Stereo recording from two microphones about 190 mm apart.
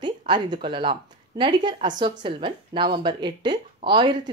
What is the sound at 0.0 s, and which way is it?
Speech, 25° right (ahead or behind).